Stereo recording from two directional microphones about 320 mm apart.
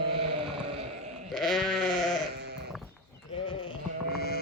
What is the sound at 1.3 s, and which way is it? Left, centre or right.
Sheep, centre.